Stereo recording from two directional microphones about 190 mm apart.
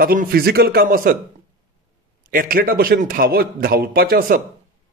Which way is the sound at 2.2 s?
45° right (ahead or behind).